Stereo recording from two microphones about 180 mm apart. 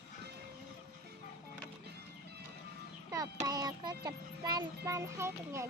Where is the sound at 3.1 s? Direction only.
20° right (ahead or behind).